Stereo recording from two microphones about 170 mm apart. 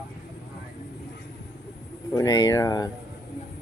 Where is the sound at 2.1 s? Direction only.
20° left (ahead or behind).